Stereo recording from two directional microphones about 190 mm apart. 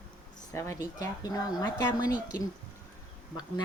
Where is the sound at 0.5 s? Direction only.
15° left (ahead or behind).